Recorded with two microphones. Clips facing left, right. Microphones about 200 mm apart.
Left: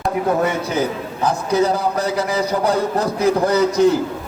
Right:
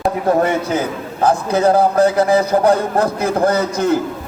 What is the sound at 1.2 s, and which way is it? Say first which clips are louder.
A man's voice: right 3 dB; 50° right (ahead or behind).